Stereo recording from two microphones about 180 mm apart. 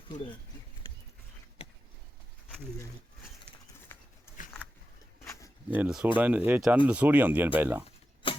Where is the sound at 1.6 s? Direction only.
35° left (ahead or behind).